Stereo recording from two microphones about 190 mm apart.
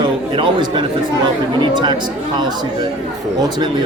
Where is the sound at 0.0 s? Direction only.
25° right (ahead or behind).